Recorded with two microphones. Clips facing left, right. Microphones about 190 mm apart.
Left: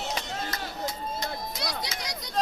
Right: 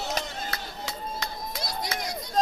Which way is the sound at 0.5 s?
70° right (ahead or behind).